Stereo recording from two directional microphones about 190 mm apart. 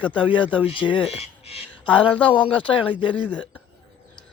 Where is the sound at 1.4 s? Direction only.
30° left (ahead or behind).